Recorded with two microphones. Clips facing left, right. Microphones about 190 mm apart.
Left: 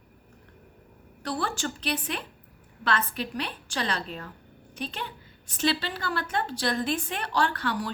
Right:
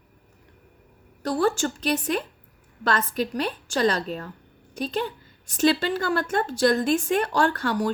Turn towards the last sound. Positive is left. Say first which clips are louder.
# right 5 dB
turn(degrees=-45)  # may be behind; listen again after turning